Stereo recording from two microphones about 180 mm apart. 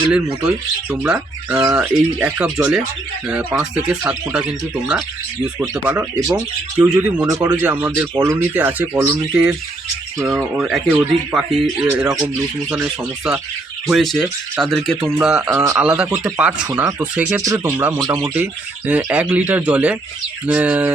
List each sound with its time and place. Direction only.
0.9 s speech: 5° right (ahead or behind)
6.1 s speech: 20° right (ahead or behind)
6.7 s speech: 5° right (ahead or behind)
7.3 s speech: 20° right (ahead or behind); by 11.9 s centre (ahead or behind)
11.9 s speech: 10° right (ahead or behind)
15.4 s speech: 15° right (ahead or behind)
16.0 s speech: 5° right (ahead or behind)